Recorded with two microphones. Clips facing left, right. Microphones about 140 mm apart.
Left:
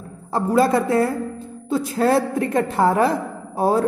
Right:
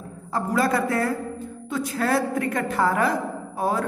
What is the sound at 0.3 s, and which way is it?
A woman's voice, 30° left (ahead or behind).